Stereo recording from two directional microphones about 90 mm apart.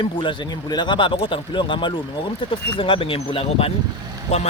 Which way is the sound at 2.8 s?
80° left.